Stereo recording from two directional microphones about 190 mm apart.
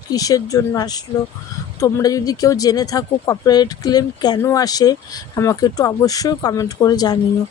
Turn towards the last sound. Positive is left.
turn(degrees=20)  # may be behind; listen again after turning